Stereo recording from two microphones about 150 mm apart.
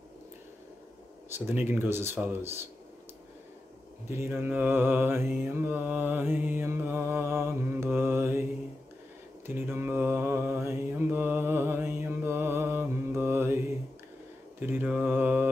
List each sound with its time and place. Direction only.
1.5 s mantra: 15° right (ahead or behind)
4.1 s mantra: 15° right (ahead or behind)
9.5 s mantra: 15° right (ahead or behind)
14.6 s mantra: 10° right (ahead or behind)